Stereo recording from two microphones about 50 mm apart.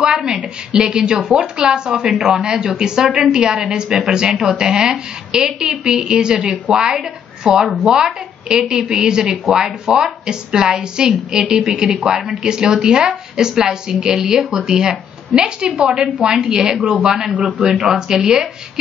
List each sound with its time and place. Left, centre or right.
0.0 s a sound: centre
0.4 s a woman's voice: centre
17.3 s a man's voice: right
17.6 s a woman's voice: centre